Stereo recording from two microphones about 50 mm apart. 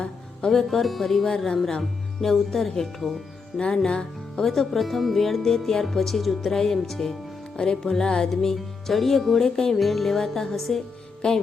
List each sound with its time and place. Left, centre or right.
0.0 s music: centre
0.7 s speech: centre
3.8 s music: centre
4.4 s speech: centre
7.5 s music: centre
8.3 s speech: centre
11.2 s music: centre